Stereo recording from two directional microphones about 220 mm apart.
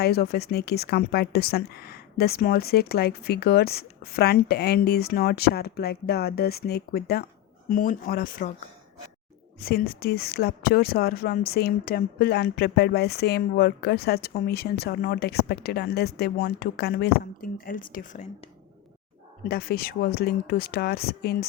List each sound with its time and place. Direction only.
0.0 s speech: 45° left (ahead or behind)
9.6 s speech: 45° left (ahead or behind)
19.5 s speech: 45° left (ahead or behind)